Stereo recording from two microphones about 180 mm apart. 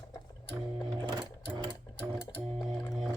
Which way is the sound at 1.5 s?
25° right (ahead or behind).